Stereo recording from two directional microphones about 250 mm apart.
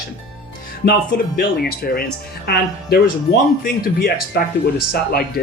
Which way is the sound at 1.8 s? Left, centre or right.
Left.